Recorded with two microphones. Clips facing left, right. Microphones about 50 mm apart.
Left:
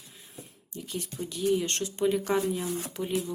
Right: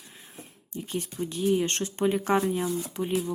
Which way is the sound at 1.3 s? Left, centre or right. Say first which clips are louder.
Right 1 dB; right.